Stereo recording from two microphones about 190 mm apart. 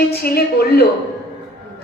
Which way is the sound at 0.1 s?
55° left (ahead or behind).